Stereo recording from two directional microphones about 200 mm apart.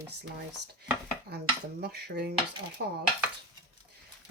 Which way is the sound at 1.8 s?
55° right (ahead or behind).